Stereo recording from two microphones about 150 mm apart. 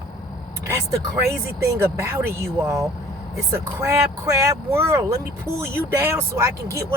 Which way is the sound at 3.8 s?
20° right (ahead or behind).